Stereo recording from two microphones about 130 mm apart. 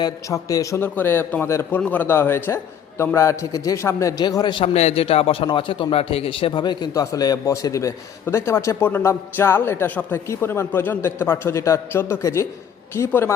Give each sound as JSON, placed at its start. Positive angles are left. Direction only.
{"t": 0.0, "sound": "a man's voice", "side_deg": 25}
{"t": 4.7, "sound": "a man's voice", "side_deg": 55}